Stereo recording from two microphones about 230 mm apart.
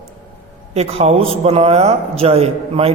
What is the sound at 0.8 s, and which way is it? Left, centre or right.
A man's voice, right.